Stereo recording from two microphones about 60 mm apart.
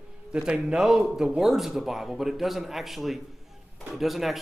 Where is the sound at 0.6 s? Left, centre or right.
Centre.